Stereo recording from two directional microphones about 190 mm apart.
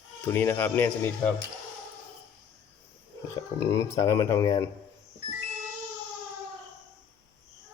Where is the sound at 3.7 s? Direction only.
15° left (ahead or behind).